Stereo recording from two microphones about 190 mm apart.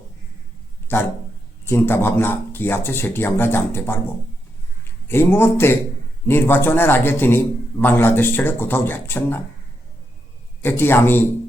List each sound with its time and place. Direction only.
0.9 s a man's voice: 10° left (ahead or behind)
5.0 s a man's voice: 10° left (ahead or behind)
10.6 s a man's voice: 10° left (ahead or behind)